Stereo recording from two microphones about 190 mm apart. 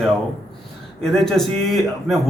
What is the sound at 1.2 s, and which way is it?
Speech, centre (ahead or behind).